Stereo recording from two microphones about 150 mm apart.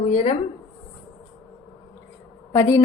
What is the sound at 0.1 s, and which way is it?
Speech, 40° left (ahead or behind).